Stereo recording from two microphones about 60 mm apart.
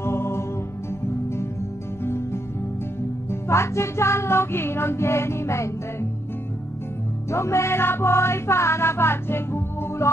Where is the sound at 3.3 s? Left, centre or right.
Left.